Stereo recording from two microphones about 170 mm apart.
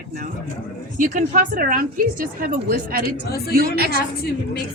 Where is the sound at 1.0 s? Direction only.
50° right (ahead or behind); by 3.9 s 65° right (ahead or behind).